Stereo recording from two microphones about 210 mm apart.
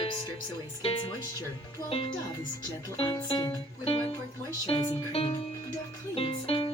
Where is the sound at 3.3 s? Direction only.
25° left (ahead or behind).